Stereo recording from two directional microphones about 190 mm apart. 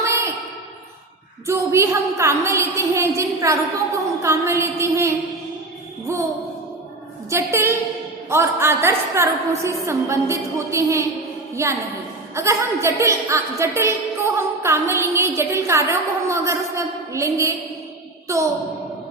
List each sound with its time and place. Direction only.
0.0 s a sound: 15° right (ahead or behind)
1.5 s a woman's voice: 15° right (ahead or behind)
7.3 s a woman's voice: 15° right (ahead or behind)